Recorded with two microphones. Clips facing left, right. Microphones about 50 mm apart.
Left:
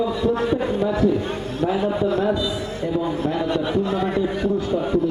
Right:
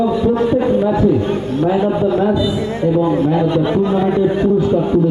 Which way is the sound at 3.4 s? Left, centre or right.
Centre.